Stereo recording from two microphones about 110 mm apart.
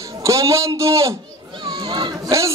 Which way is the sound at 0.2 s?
30° right (ahead or behind).